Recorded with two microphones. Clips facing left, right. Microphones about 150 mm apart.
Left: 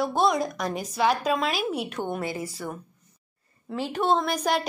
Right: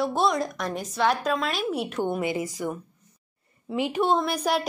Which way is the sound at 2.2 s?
20° right (ahead or behind).